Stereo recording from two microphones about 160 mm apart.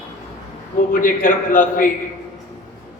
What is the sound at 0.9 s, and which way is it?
A man's voice, 60° left (ahead or behind).